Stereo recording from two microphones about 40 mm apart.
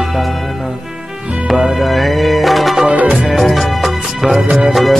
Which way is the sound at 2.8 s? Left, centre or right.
Right.